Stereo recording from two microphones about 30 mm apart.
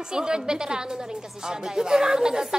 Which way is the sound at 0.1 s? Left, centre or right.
Right.